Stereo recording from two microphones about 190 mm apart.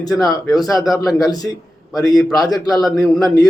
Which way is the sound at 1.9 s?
20° left (ahead or behind).